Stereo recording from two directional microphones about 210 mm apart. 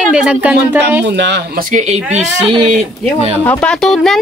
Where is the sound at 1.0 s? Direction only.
60° right (ahead or behind).